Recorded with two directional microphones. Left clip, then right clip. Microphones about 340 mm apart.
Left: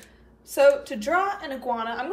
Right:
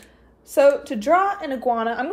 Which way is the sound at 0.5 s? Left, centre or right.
Right.